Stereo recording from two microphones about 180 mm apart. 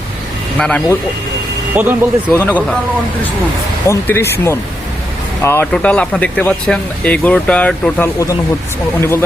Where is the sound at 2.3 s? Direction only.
10° left (ahead or behind).